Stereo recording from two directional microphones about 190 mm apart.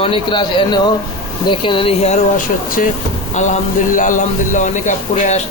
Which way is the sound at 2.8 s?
45° left (ahead or behind).